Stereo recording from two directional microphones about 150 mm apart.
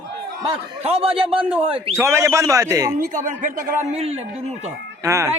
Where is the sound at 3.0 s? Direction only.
60° right (ahead or behind).